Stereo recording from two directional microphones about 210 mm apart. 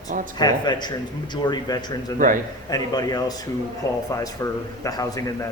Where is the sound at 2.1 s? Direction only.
40° right (ahead or behind).